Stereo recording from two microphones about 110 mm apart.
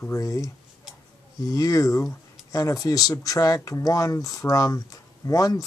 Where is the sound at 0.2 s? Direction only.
30° left (ahead or behind).